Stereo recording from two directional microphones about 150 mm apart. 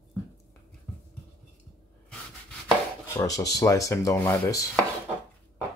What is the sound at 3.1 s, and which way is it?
Speech, 20° left (ahead or behind).